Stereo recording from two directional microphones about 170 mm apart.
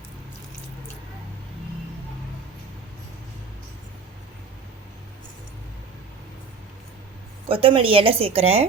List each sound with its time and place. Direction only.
7.4 s a woman's voice: 30° right (ahead or behind)